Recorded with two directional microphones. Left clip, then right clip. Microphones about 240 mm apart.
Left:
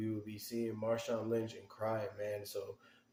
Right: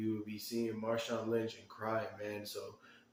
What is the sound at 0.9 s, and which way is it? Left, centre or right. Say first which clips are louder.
Speech: even; left.